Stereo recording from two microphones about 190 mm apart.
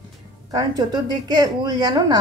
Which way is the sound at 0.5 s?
20° right (ahead or behind).